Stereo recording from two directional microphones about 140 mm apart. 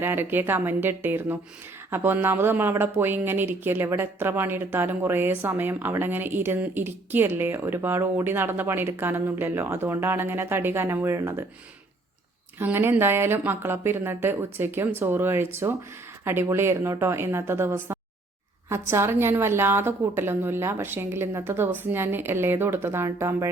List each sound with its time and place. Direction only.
0.0 s speech: 15° right (ahead or behind)
12.5 s speech: 15° right (ahead or behind)